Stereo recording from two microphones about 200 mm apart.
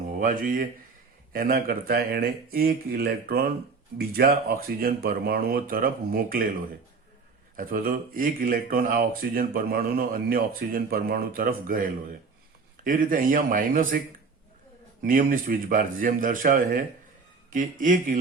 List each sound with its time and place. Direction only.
0.2 s speech: 40° right (ahead or behind)
7.5 s speech: 45° right (ahead or behind)
15.0 s speech: 45° right (ahead or behind)